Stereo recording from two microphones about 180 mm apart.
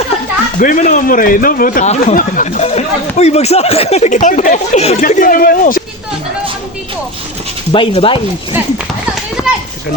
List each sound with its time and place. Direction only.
0.6 s a man's voice: 45° left (ahead or behind)
4.9 s a man's voice: 50° left (ahead or behind)
7.7 s speech: 30° left (ahead or behind)
9.4 s children playing: 20° left (ahead or behind)